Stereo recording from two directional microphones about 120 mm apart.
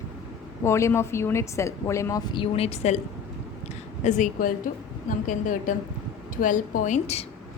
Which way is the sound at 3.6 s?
90° left.